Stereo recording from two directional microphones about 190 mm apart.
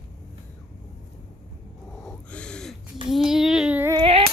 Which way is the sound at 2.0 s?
5° left (ahead or behind).